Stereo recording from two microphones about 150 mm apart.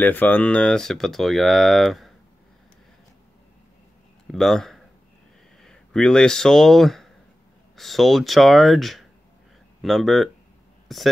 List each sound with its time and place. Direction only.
0.0 s speech: 10° left (ahead or behind)
4.3 s speech: centre (ahead or behind)